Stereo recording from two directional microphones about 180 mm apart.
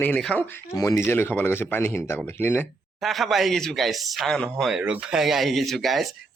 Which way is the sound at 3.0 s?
Centre (ahead or behind).